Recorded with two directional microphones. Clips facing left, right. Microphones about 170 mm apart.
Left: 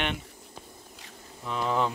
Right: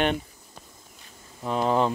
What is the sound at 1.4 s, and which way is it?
Speech, 40° right (ahead or behind).